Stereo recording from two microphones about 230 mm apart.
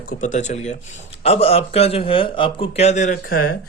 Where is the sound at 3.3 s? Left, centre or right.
Left.